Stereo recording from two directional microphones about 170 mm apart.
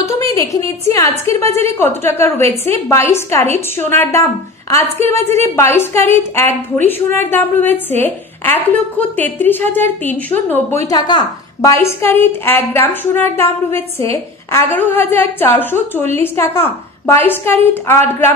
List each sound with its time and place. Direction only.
0.0 s a woman's voice: 20° left (ahead or behind)
10.9 s a woman's voice: 25° left (ahead or behind)